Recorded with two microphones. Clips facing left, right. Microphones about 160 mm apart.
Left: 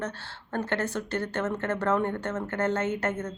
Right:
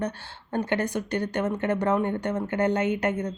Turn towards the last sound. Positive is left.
turn(degrees=-15)  # may be behind; listen again after turning